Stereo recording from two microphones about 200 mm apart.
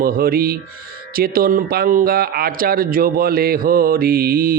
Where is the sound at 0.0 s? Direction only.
50° right (ahead or behind).